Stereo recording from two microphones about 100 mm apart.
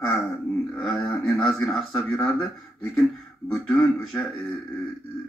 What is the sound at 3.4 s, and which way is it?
Speech, 5° left (ahead or behind).